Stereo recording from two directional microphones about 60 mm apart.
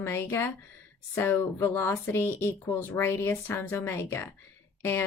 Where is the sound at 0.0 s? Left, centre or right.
Left.